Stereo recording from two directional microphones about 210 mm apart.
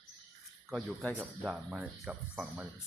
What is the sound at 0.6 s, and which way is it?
Speech, centre (ahead or behind).